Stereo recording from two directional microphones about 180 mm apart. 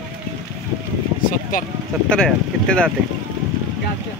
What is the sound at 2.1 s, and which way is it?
Speech, 5° left (ahead or behind).